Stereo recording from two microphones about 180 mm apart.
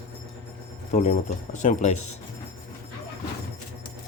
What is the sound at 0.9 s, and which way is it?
Speech, 40° left (ahead or behind).